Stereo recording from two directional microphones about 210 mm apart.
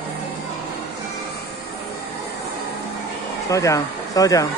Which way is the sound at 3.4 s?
15° left (ahead or behind).